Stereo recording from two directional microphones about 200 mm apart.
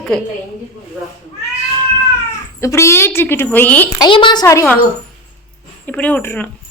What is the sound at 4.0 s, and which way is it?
Speech, 25° left (ahead or behind).